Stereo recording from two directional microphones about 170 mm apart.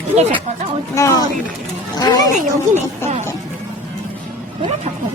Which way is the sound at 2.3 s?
45° right (ahead or behind).